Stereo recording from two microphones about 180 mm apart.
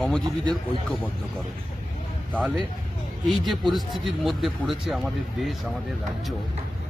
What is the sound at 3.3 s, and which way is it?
Speech, centre (ahead or behind).